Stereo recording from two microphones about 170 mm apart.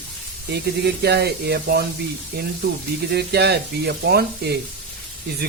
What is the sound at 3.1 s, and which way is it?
Speech, 75° right (ahead or behind).